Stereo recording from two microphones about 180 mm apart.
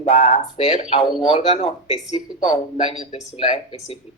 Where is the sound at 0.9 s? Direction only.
30° left (ahead or behind).